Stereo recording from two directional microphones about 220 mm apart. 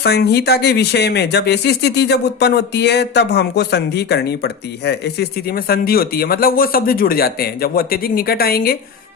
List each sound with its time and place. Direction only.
0.0 s speech: 50° left (ahead or behind)